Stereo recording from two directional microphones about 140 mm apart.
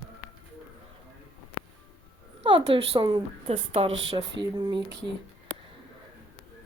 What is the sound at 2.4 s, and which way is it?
A woman's voice, 40° right (ahead or behind).